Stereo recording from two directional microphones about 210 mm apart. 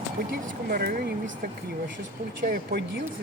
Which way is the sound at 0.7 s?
45° right (ahead or behind).